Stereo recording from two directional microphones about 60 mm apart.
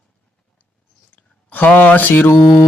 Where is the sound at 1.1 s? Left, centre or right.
Left.